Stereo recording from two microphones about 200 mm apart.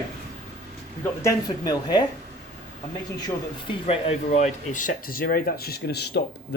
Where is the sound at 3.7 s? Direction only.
30° left (ahead or behind).